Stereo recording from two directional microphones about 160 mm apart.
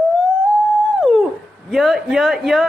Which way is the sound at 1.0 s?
5° right (ahead or behind).